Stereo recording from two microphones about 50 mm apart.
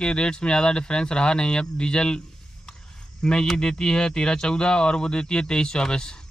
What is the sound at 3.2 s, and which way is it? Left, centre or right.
Speech, centre.